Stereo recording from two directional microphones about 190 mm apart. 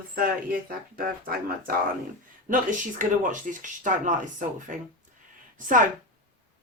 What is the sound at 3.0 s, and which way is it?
Speech, 45° right (ahead or behind).